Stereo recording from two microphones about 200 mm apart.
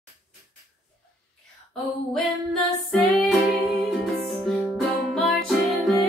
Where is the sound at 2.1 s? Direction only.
5° left (ahead or behind).